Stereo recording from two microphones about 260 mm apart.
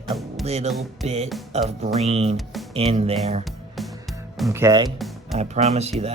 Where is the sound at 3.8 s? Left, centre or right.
Centre.